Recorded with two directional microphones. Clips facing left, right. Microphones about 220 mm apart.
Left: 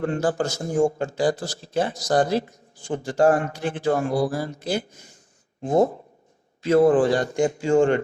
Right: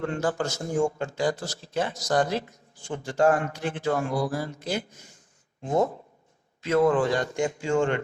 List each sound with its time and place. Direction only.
0.0 s speech: 35° left (ahead or behind)